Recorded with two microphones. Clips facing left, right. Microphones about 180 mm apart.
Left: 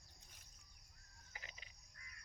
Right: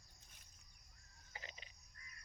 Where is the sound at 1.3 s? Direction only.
30° right (ahead or behind).